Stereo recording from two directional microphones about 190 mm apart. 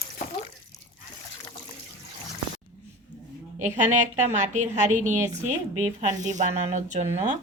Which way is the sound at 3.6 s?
40° right (ahead or behind).